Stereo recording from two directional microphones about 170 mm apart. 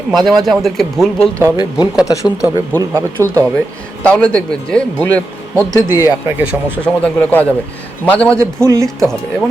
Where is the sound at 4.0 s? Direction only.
5° left (ahead or behind).